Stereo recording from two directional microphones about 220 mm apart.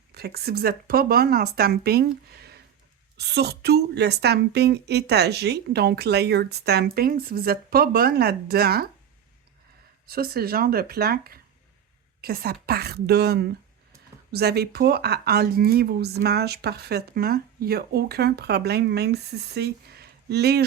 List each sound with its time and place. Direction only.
0.1 s speech: 45° right (ahead or behind)
10.1 s speech: 45° right (ahead or behind)